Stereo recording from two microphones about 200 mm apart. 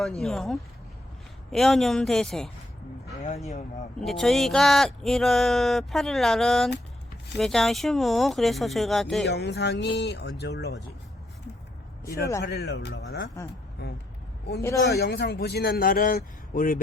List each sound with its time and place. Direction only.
0.0 s speech: centre (ahead or behind)
4.0 s speech: centre (ahead or behind)
9.2 s speech: 55° left (ahead or behind)
12.4 s speech: 55° left (ahead or behind)
13.4 s speech: 15° left (ahead or behind)
14.9 s a man's voice: 55° left (ahead or behind)